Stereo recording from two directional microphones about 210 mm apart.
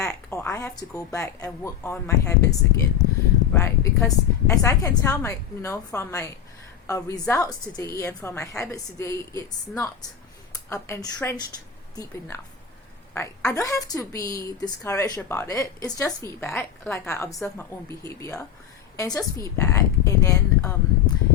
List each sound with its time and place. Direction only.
0.0 s a woman's voice: 15° left (ahead or behind)
3.5 s a woman's voice: 15° left (ahead or behind)